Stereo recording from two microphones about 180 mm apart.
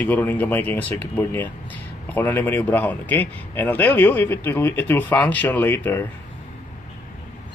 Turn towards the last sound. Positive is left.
turn(degrees=15)  # may be behind; listen again after turning